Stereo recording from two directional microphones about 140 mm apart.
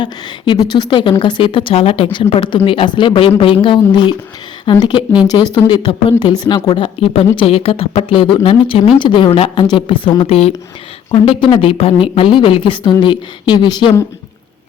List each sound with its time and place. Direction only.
0.0 s a woman's voice: 35° left (ahead or behind)